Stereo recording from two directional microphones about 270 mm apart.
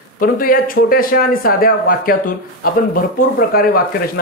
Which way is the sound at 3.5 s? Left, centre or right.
Left.